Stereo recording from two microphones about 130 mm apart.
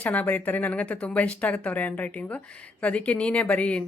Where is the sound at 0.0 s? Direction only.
15° left (ahead or behind).